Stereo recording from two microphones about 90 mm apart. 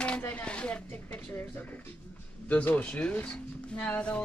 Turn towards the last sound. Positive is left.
turn(degrees=15)  # may be behind; listen again after turning